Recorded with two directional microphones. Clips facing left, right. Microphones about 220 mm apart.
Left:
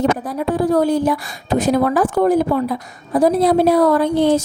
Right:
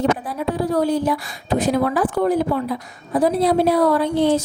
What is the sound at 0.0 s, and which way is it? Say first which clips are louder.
A woman's voice: left 2 dB; 45° left (ahead or behind).